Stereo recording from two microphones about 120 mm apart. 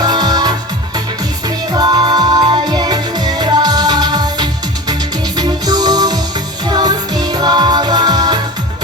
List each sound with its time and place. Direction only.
0.0 s music: 35° right (ahead or behind)
1.7 s music: 35° right (ahead or behind)